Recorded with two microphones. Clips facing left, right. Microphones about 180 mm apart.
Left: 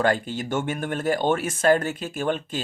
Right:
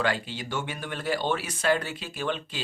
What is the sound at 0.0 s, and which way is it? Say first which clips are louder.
Speech: left 6 dB; 50° left (ahead or behind).